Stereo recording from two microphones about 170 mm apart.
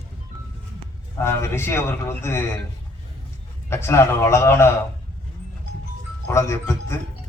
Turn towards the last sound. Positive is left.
turn(degrees=15)  # may be behind; listen again after turning